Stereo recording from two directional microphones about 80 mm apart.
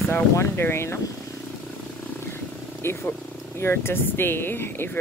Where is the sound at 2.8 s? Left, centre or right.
Left.